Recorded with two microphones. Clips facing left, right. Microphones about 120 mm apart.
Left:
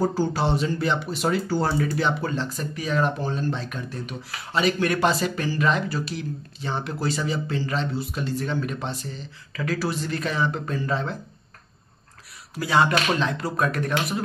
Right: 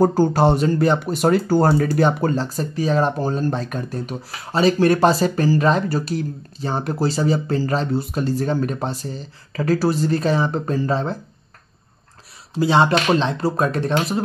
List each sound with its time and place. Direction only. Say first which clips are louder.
0.0 s speech: right 8 dB; 45° right (ahead or behind)
12.5 s speech: right 5 dB; 25° right (ahead or behind)